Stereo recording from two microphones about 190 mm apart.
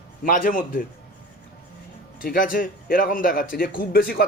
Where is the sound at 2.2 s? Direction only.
50° left (ahead or behind).